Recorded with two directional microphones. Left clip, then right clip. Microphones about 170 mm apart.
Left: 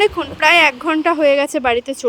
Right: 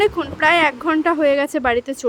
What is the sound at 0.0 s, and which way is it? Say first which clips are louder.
A woman's voice: left 2 dB; 30° left (ahead or behind).